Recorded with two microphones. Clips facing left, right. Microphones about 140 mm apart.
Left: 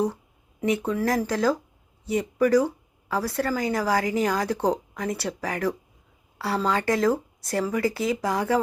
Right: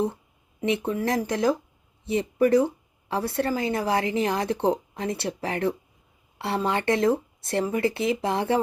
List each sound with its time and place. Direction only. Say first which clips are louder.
0.6 s a woman's voice: left 1 dB; 25° right (ahead or behind)